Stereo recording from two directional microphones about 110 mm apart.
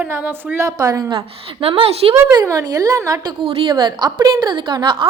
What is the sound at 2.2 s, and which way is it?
A woman's voice, 30° right (ahead or behind).